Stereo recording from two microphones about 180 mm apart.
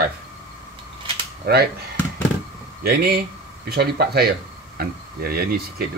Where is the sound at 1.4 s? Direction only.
60° right (ahead or behind).